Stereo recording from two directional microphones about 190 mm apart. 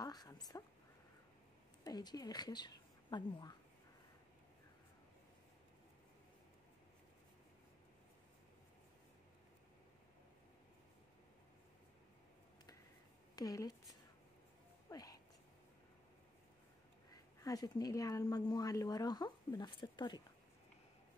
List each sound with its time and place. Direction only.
0.0 s speech: 20° left (ahead or behind)
1.9 s speech: 20° left (ahead or behind)
13.4 s speech: 20° left (ahead or behind)
14.9 s a sound: 20° left (ahead or behind)
17.1 s speech: 20° left (ahead or behind)